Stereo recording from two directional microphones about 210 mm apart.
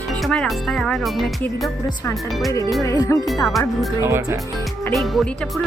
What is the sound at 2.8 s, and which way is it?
Speech, 15° left (ahead or behind).